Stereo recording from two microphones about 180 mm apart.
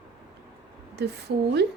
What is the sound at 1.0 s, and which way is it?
Speech, 70° right (ahead or behind).